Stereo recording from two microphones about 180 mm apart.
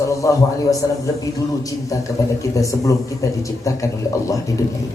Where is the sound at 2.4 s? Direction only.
20° left (ahead or behind).